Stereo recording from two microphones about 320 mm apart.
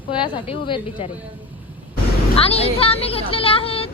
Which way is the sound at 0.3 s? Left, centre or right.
Centre.